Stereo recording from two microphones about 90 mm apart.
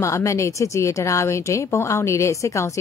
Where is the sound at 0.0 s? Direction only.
35° left (ahead or behind).